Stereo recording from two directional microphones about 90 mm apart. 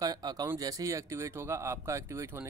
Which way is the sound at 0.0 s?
45° right (ahead or behind).